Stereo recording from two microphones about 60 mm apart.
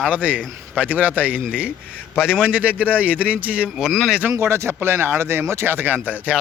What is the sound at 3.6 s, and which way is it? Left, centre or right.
Speech, centre.